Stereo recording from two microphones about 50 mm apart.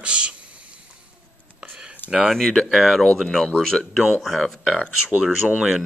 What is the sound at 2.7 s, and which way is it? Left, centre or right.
Speech, centre.